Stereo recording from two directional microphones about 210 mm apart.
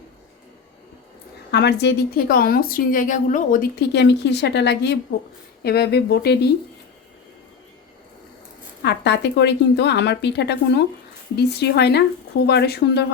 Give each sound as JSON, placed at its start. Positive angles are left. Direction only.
{"t": 1.5, "sound": "a woman's voice", "side_deg": 55}
{"t": 8.8, "sound": "a woman's voice", "side_deg": 55}